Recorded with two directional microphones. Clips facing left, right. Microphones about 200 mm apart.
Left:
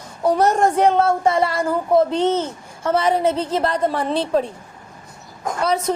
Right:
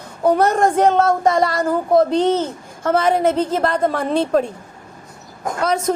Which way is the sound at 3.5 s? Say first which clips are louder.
Right 2 dB; 50° right (ahead or behind).